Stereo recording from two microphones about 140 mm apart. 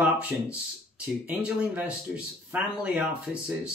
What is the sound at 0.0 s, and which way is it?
Speech, 10° right (ahead or behind).